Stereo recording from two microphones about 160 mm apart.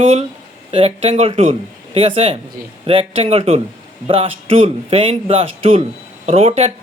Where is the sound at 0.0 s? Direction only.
40° right (ahead or behind).